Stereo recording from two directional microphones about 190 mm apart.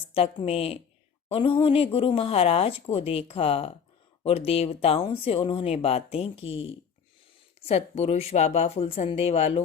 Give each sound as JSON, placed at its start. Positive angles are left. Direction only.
{"t": 0.1, "sound": "speech", "side_deg": 30}